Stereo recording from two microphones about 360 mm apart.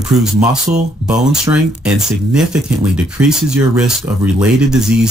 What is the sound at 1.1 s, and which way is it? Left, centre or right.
Speech, centre.